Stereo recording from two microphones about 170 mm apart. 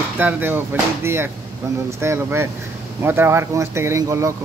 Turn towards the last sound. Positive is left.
turn(degrees=-15)  # may be behind; listen again after turning